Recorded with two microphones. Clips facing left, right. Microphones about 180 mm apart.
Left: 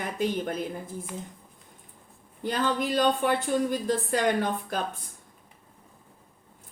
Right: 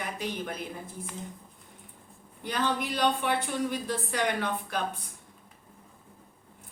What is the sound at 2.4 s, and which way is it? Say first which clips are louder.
Speech: left 3 dB; 45° left (ahead or behind).